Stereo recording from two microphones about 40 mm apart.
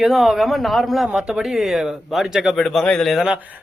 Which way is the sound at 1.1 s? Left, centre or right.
Centre.